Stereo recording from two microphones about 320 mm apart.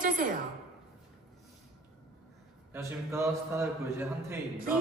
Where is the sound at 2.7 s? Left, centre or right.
Centre.